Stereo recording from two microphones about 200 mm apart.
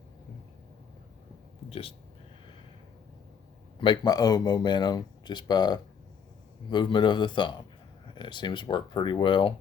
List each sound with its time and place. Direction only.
1.7 s speech: 30° left (ahead or behind)
3.8 s speech: 20° left (ahead or behind)